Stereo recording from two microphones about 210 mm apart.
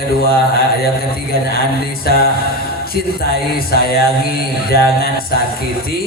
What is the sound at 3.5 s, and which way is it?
Mantra, 45° left (ahead or behind).